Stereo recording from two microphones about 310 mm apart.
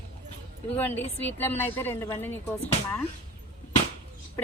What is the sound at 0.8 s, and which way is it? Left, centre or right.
A woman's voice, centre.